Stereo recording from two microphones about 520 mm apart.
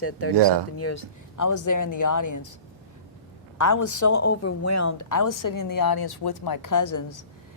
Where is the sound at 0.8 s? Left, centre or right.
Left.